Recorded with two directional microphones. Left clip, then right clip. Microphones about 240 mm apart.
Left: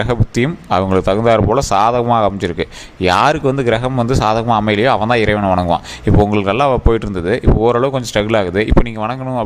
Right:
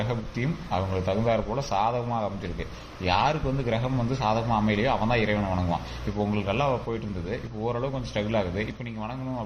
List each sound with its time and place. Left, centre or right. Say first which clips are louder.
0.1 s a man's voice: left 14 dB; left